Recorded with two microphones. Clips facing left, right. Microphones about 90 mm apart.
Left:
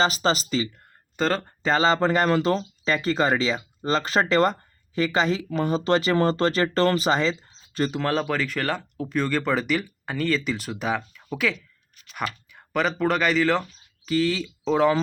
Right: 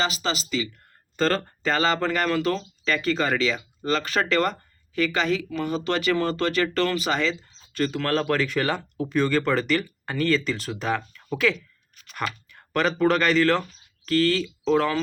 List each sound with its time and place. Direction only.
0.0 s speech: 35° left (ahead or behind)
1.1 s speech: 15° left (ahead or behind)